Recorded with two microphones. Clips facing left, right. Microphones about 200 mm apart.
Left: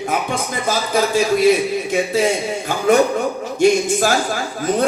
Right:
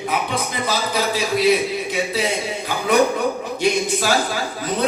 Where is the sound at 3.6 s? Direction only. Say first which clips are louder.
Left 7 dB; 45° left (ahead or behind).